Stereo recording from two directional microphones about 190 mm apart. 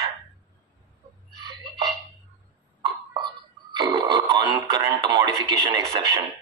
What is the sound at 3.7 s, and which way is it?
Radio, 25° right (ahead or behind).